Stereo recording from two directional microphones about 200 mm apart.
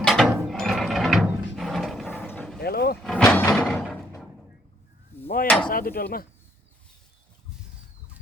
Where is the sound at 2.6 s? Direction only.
50° left (ahead or behind).